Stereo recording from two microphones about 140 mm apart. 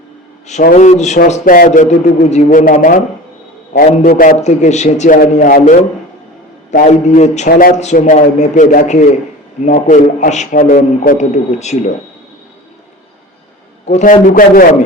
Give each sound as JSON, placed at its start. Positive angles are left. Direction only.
{"t": 0.6, "sound": "a man's voice", "side_deg": 65}
{"t": 1.3, "sound": "a man's voice", "side_deg": 85}
{"t": 4.4, "sound": "a man's voice", "side_deg": 55}
{"t": 6.7, "sound": "a man's voice", "side_deg": 55}
{"t": 11.3, "sound": "speech", "side_deg": 55}
{"t": 13.8, "sound": "a man's voice", "side_deg": 60}